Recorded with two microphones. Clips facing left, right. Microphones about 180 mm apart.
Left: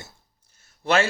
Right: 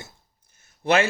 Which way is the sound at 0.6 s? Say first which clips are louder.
Right 1 dB; 15° right (ahead or behind).